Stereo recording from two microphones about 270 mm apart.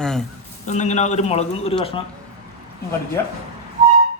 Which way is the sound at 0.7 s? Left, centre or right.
Left.